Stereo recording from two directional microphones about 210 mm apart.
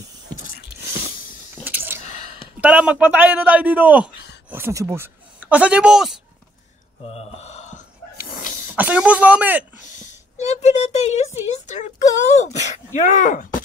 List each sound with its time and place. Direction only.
1.5 s squish: 10° right (ahead or behind)
2.0 s a sound: 35° left (ahead or behind)
2.6 s a man's voice: 5° right (ahead or behind)
7.1 s a sound: 30° left (ahead or behind)
8.7 s a man's voice: 5° right (ahead or behind)
9.9 s speech: 30° left (ahead or behind)